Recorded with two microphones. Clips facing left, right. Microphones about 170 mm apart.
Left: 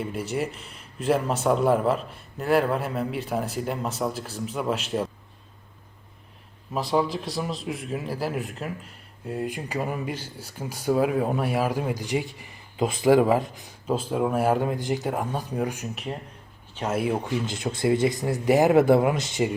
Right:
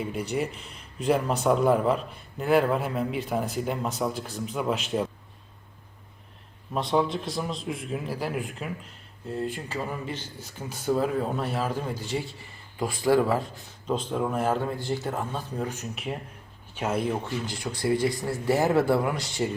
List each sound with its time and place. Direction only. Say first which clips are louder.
0.0 s a man's voice: left 1 dB; centre (ahead or behind)
6.7 s a man's voice: left 1 dB; 5° left (ahead or behind)
16.9 s speech: left 3 dB; 10° left (ahead or behind)